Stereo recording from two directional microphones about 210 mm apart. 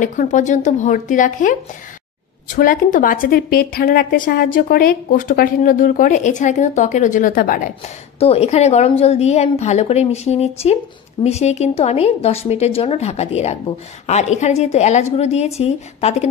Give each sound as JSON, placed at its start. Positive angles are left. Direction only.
{"t": 0.0, "sound": "a woman's voice", "side_deg": 35}